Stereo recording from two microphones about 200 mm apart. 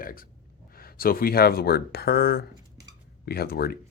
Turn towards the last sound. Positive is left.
turn(degrees=50)  # may be behind; listen again after turning